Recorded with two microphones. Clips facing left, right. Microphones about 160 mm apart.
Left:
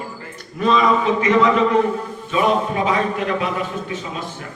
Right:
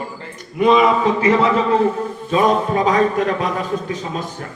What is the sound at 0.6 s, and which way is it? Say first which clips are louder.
Speech: right 4 dB; 20° right (ahead or behind).